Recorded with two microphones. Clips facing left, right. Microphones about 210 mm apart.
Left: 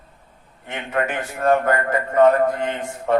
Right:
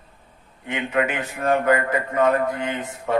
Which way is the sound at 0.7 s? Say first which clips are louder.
Right 1 dB; 45° left (ahead or behind).